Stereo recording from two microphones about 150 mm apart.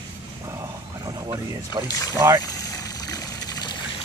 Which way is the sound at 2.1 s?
25° right (ahead or behind).